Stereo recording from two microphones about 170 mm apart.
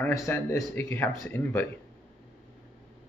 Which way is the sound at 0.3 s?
15° left (ahead or behind).